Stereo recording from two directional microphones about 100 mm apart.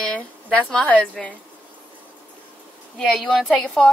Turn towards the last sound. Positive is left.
turn(degrees=5)  # may be behind; listen again after turning